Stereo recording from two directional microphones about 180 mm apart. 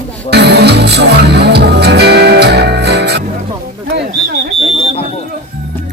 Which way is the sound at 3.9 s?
65° right (ahead or behind).